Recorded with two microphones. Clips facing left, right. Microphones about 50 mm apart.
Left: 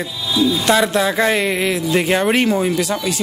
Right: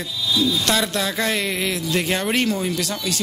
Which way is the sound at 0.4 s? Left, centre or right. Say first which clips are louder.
Left 6 dB; centre.